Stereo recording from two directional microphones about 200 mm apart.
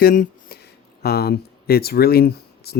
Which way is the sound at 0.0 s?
45° left (ahead or behind).